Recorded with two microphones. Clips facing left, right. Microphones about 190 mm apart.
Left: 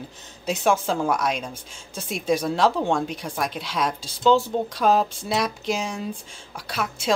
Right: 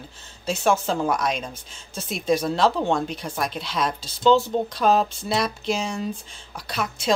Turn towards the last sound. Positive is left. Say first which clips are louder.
# right 1 dB
turn(degrees=10)  # may be behind; listen again after turning